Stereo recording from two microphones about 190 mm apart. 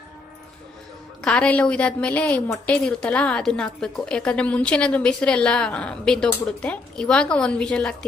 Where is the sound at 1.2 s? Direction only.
5° left (ahead or behind).